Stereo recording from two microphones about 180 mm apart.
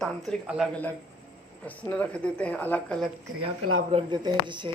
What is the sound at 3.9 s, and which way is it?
Speech, 30° right (ahead or behind).